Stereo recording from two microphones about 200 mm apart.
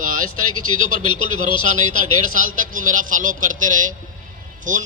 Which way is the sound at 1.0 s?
25° left (ahead or behind).